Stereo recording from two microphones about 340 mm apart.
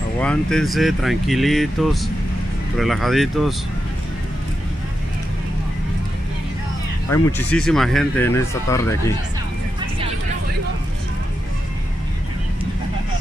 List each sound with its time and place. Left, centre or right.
0.2 s speech: centre
7.1 s speech: centre